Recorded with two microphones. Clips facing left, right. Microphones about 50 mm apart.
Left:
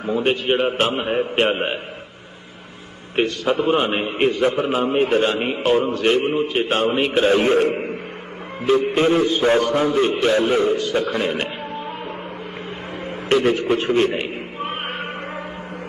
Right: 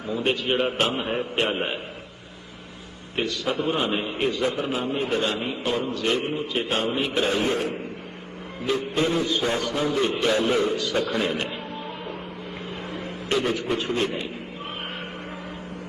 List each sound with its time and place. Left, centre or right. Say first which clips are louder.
0.0 s a man's voice: left 6 dB; left
0.3 s a man's voice: left 3 dB; left
3.2 s a man's voice: left 6 dB; left
5.4 s a man's voice: left 8 dB; left
5.9 s a man's voice: left 7 dB; left
6.3 s a man's voice: left 6 dB; left
7.1 s a man's voice: left 9 dB; left
7.6 s a man's voice: left 9 dB; left
8.9 s a man's voice: left 6 dB; left
13.1 s a man's voice: left 7 dB; left
14.1 s cat: left 6 dB; left